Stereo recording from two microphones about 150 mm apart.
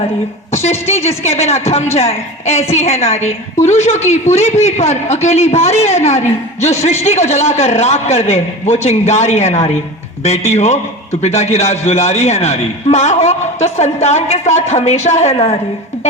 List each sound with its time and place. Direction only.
0.5 s a woman's voice: 45° left (ahead or behind)